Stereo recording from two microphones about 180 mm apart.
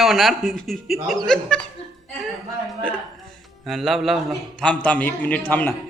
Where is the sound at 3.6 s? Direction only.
Centre (ahead or behind).